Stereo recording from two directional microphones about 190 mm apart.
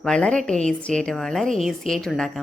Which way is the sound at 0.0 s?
5° left (ahead or behind).